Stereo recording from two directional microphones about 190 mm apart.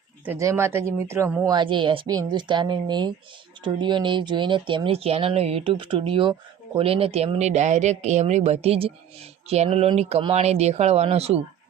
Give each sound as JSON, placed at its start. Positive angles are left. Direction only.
{"t": 0.3, "sound": "speech", "side_deg": -15}
{"t": 1.5, "sound": "speech", "side_deg": -25}